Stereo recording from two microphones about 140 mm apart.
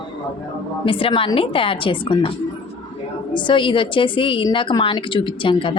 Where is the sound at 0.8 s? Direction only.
40° left (ahead or behind).